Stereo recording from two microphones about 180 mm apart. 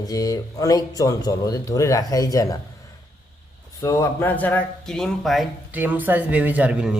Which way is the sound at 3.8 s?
15° left (ahead or behind).